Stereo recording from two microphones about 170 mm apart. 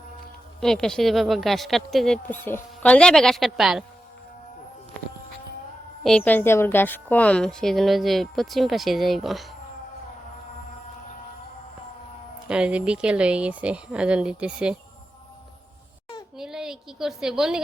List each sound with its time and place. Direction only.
0.6 s a woman's voice: 5° left (ahead or behind)
6.0 s a woman's voice: 5° left (ahead or behind)
12.5 s speech: 5° right (ahead or behind)
16.4 s a sound: 5° right (ahead or behind)